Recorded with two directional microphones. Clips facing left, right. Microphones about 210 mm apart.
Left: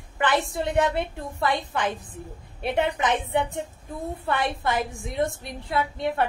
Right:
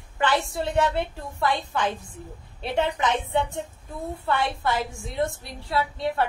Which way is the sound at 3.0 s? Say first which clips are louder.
Even; 20° left (ahead or behind).